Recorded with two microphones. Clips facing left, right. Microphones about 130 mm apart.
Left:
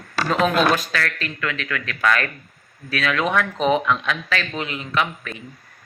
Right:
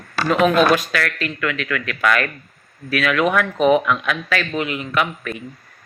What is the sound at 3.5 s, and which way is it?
Speech, 5° right (ahead or behind).